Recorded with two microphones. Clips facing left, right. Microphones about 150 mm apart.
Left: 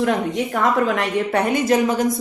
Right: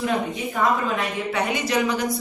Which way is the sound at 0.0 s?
80° left.